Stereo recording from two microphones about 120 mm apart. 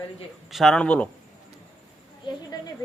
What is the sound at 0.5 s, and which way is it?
Speech, 5° left (ahead or behind).